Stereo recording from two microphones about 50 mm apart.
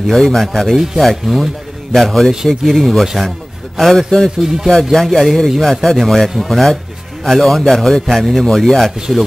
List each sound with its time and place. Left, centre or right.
0.0 s a man's voice: centre